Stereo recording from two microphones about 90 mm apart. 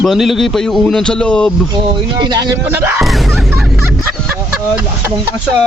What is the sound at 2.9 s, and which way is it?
Music, centre (ahead or behind).